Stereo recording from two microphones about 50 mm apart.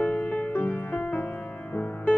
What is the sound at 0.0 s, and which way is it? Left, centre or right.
Music, left.